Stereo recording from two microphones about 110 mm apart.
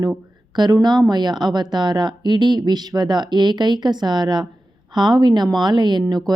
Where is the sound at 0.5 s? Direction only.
40° right (ahead or behind).